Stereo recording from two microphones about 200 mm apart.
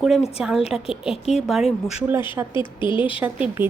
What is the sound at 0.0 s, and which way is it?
Speech, centre (ahead or behind).